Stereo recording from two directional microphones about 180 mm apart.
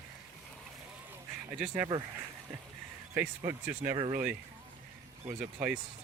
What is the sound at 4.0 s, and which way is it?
Speech, 35° right (ahead or behind).